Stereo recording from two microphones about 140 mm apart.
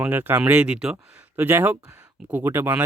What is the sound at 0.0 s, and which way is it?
Speech, 10° right (ahead or behind).